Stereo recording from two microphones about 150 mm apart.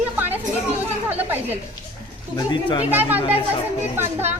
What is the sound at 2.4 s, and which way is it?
Speech, 30° left (ahead or behind).